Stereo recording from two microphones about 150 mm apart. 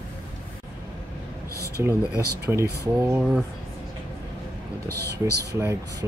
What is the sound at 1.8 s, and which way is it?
Speech, 15° right (ahead or behind).